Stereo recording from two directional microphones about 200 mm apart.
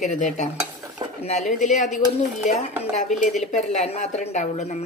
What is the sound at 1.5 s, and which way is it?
Speech, 40° left (ahead or behind).